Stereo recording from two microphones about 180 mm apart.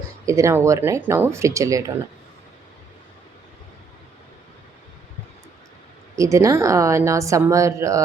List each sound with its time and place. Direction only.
0.3 s a woman's voice: 15° right (ahead or behind)
6.1 s a woman's voice: 15° right (ahead or behind)